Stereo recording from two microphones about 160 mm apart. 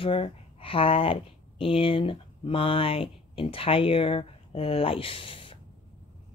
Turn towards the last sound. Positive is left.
turn(degrees=35)  # may be behind; listen again after turning